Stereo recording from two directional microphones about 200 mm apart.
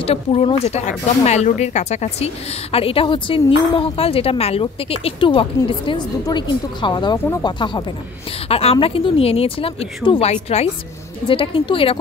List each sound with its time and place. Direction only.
0.0 s speech: 30° left (ahead or behind)